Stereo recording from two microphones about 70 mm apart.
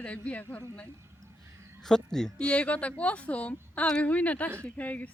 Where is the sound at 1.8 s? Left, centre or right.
Centre.